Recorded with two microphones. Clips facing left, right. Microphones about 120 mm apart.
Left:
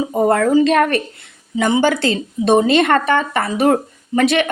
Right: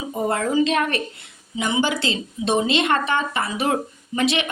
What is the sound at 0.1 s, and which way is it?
A woman's voice, 45° left (ahead or behind).